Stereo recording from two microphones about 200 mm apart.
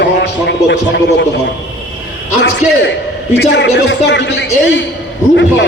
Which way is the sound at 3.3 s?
60° left (ahead or behind).